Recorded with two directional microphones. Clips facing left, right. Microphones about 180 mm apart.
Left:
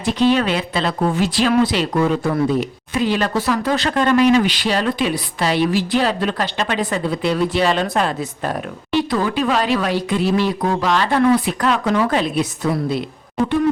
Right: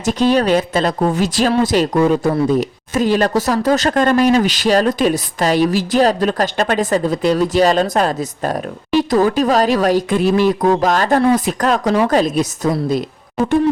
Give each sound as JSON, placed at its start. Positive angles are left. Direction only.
{"t": 0.0, "sound": "speech", "side_deg": -45}
{"t": 13.4, "sound": "owl", "side_deg": -5}